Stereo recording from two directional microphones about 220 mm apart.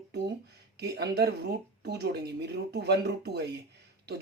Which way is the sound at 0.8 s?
50° right (ahead or behind).